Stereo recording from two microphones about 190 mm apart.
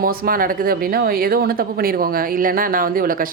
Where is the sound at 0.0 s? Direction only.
50° right (ahead or behind).